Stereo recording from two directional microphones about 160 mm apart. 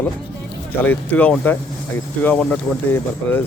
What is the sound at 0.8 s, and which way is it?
A man's voice, 10° left (ahead or behind).